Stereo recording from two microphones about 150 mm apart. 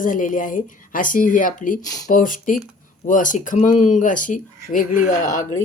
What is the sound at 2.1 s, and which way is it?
Speech, 65° left (ahead or behind).